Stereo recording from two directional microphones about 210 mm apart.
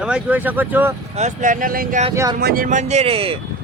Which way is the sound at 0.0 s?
5° right (ahead or behind).